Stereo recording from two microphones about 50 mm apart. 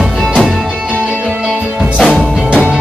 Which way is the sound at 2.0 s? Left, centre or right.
Centre.